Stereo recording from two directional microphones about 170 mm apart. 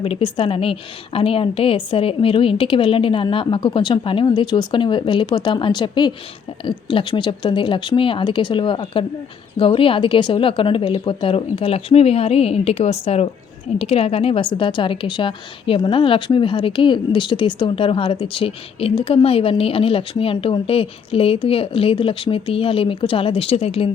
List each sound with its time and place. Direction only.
0.0 s a woman's voice: 30° left (ahead or behind)